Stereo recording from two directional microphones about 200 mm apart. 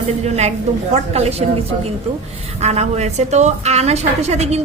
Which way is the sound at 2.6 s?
35° right (ahead or behind).